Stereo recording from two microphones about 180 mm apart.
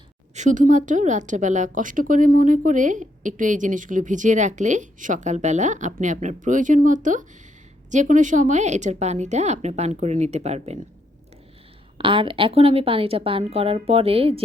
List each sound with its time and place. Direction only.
0.3 s a woman's voice: 45° right (ahead or behind)
11.9 s a woman's voice: 30° right (ahead or behind)